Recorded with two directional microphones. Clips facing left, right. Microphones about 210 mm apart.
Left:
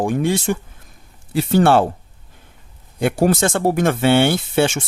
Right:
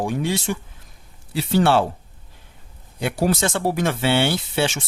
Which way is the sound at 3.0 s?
50° left (ahead or behind).